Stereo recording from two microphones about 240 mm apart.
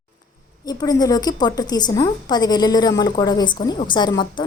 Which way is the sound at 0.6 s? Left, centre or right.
Centre.